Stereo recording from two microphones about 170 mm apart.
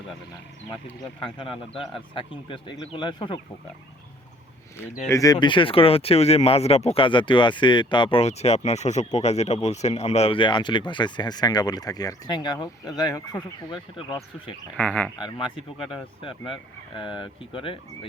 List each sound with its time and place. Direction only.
1.2 s a man's voice: 30° left (ahead or behind)
5.0 s speech: 20° left (ahead or behind)
14.8 s speech: 5° left (ahead or behind)
15.9 s speech: 30° left (ahead or behind)